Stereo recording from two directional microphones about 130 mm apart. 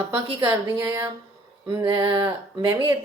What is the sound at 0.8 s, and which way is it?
Speech, 20° right (ahead or behind).